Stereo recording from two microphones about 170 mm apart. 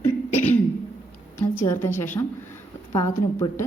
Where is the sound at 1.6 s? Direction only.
15° left (ahead or behind).